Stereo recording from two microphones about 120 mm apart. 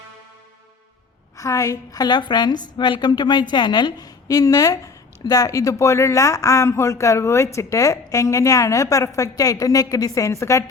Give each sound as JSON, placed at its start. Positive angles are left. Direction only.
{"t": 1.4, "sound": "a woman's voice", "side_deg": 25}